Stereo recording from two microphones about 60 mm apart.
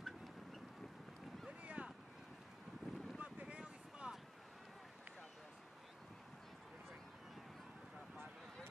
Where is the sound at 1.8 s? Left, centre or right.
Right.